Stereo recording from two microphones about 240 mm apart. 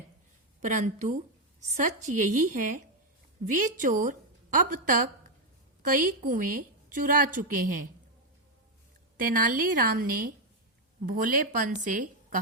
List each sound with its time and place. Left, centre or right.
0.6 s a woman's voice: right
9.1 s a woman's voice: right